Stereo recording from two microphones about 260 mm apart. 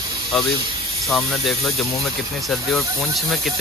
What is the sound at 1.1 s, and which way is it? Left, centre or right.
Speech, centre.